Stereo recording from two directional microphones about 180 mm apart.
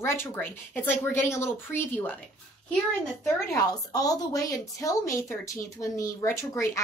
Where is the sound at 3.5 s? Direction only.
20° left (ahead or behind).